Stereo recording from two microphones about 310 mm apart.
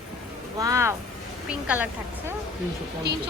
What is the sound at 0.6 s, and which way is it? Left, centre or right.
A woman's voice, centre.